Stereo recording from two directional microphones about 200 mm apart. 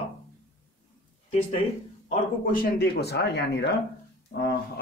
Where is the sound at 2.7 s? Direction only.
55° left (ahead or behind).